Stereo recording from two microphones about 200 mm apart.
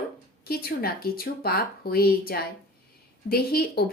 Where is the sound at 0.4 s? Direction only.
50° left (ahead or behind).